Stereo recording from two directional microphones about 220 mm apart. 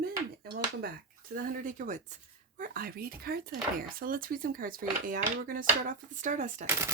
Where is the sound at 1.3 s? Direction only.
35° right (ahead or behind).